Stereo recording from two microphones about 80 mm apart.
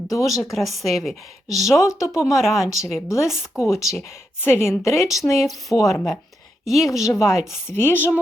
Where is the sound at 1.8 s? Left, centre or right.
Left.